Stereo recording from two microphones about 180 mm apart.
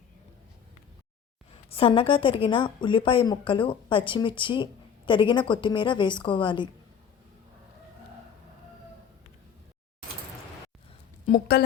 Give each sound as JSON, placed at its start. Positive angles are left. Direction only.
{"t": 1.7, "sound": "a woman's voice", "side_deg": 30}
{"t": 11.3, "sound": "a woman's voice", "side_deg": 60}